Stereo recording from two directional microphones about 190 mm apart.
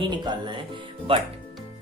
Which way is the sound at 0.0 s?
25° right (ahead or behind).